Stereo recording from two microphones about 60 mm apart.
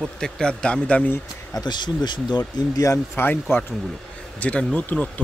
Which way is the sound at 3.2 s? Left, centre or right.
Left.